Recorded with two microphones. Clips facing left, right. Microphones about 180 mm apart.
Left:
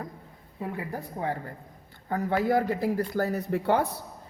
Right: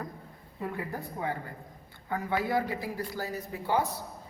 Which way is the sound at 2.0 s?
45° left (ahead or behind).